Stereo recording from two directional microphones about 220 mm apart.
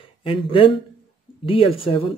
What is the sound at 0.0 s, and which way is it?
Speech, 25° left (ahead or behind).